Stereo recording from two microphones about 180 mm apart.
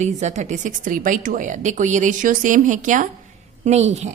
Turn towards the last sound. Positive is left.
turn(degrees=-40)  # may be behind; listen again after turning